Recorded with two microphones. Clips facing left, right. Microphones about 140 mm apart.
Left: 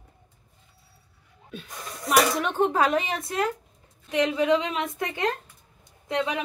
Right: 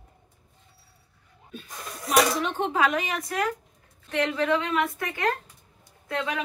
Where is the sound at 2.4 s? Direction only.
45° left (ahead or behind); by 3.4 s 30° left (ahead or behind).